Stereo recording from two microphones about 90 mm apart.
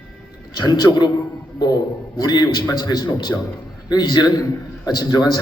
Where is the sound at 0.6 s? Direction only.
50° left (ahead or behind).